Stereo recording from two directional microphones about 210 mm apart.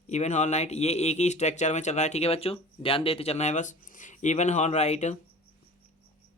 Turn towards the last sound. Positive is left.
turn(degrees=35)  # may be behind; listen again after turning